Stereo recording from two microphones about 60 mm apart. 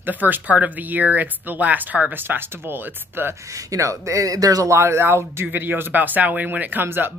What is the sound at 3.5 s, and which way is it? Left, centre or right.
Speech, right.